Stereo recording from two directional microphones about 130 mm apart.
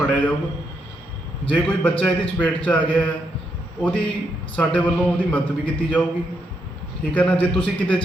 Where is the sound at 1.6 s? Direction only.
10° left (ahead or behind).